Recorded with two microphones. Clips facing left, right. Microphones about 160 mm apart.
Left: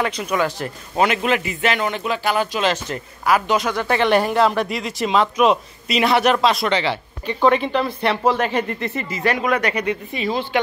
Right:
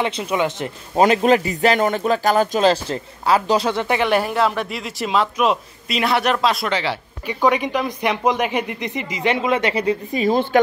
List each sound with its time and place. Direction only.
0.0 s speech: 25° right (ahead or behind)
0.9 s speech: 35° right (ahead or behind)
4.0 s a man's voice: 5° right (ahead or behind); by 10.6 s 45° right (ahead or behind)